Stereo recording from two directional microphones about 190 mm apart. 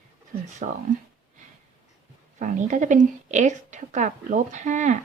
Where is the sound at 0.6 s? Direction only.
40° right (ahead or behind).